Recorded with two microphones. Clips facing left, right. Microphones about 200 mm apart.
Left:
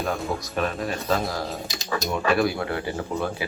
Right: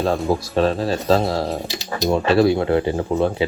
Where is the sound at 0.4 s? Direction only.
30° right (ahead or behind).